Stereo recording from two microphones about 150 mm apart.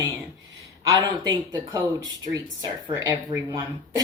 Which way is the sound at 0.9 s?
25° right (ahead or behind).